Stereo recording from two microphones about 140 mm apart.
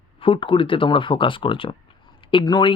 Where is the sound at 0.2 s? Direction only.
40° left (ahead or behind).